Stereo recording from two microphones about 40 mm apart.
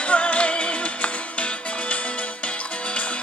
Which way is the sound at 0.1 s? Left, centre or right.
Left.